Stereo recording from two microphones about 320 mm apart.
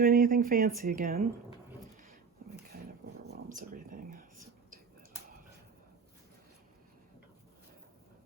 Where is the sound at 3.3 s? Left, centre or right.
Right.